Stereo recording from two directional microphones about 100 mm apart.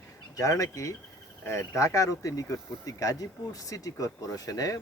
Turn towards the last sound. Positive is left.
turn(degrees=35)  # may be behind; listen again after turning